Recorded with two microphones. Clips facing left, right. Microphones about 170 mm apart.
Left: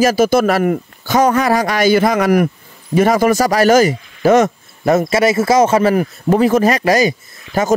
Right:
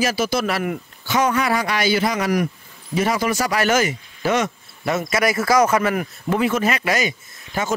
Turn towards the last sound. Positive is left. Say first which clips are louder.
# left 8 dB
turn(degrees=40)  # may be behind; listen again after turning